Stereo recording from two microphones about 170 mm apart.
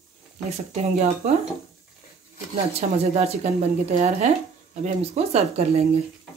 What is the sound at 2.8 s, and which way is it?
Speech, 45° right (ahead or behind).